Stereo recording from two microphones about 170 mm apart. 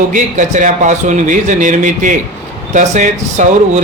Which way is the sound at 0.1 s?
50° right (ahead or behind).